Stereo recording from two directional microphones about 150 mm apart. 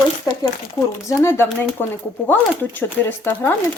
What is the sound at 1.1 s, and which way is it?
Speech, 20° left (ahead or behind).